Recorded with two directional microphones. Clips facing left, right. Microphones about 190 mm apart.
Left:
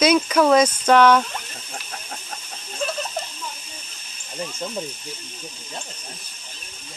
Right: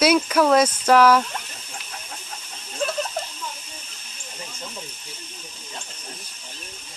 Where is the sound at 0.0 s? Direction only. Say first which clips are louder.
Left 1 dB; 5° right (ahead or behind).